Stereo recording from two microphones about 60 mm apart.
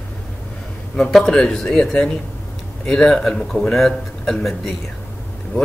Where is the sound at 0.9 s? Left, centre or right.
Centre.